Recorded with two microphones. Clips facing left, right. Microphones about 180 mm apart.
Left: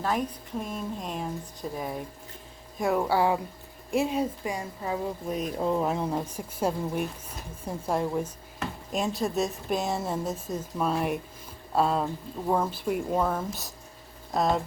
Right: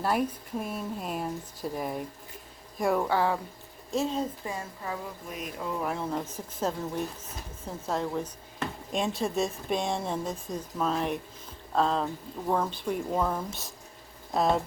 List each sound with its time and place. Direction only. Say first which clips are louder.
0.0 s a woman's voice: right 1 dB; 10° right (ahead or behind); by 5.1 s 20° left (ahead or behind)
5.3 s a woman's voice: left 7 dB; 35° left (ahead or behind); by 14.6 s centre (ahead or behind)